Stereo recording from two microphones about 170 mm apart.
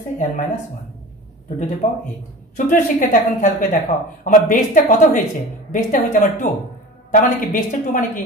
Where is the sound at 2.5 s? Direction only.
50° left (ahead or behind).